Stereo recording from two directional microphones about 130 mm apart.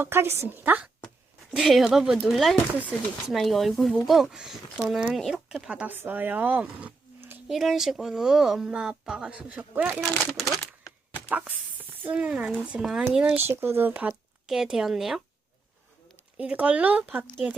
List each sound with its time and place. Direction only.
0.0 s a woman's voice: 20° right (ahead or behind)
1.5 s speech: 5° right (ahead or behind)
7.4 s speech: centre (ahead or behind)
10.1 s speech: 5° left (ahead or behind)
11.3 s a woman's voice: 10° right (ahead or behind)
13.5 s speech: 15° right (ahead or behind); by 15.2 s centre (ahead or behind)
16.4 s a woman's voice: 10° right (ahead or behind)